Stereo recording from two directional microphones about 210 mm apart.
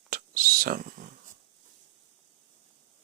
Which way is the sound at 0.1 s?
45° right (ahead or behind).